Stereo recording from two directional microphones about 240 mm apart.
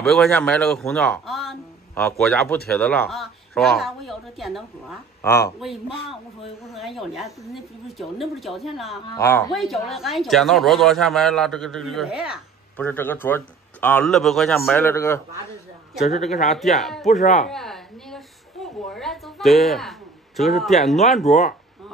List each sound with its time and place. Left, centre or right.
0.0 s speech: centre
5.2 s speech: centre
6.7 s speech: centre
9.1 s a man's voice: centre
9.5 s speech: centre
12.8 s a man's voice: centre
17.5 s a sound: centre
21.3 s speech: left